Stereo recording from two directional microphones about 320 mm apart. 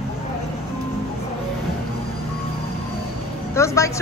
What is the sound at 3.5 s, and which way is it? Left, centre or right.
Speech, centre.